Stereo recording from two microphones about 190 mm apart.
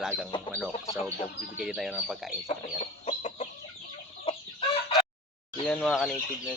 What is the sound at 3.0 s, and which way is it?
Chicken, 35° left (ahead or behind).